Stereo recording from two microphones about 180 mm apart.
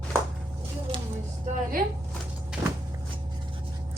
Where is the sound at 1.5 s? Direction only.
40° right (ahead or behind).